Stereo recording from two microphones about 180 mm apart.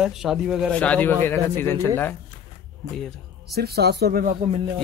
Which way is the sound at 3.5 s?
60° right (ahead or behind).